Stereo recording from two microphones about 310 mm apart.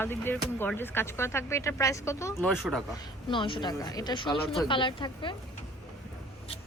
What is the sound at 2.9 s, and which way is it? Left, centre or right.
Speech, centre.